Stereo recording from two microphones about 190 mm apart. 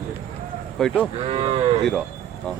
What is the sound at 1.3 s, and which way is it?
Cattle, 30° right (ahead or behind).